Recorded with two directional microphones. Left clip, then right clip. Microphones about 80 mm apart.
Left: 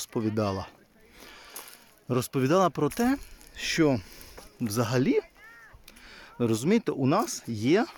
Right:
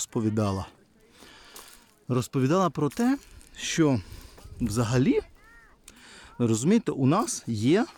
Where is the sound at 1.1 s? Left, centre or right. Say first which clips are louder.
Left 2 dB; right.